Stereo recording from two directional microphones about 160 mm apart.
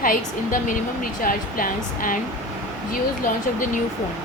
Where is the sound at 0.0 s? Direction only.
60° left (ahead or behind).